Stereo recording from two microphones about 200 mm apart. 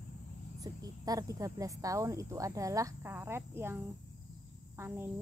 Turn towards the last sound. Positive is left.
turn(degrees=-10)  # may be behind; listen again after turning